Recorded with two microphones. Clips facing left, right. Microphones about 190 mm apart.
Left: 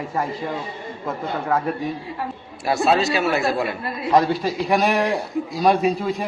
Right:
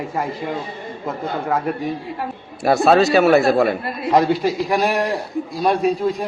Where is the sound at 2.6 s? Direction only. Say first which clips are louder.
Right 5 dB; 55° right (ahead or behind).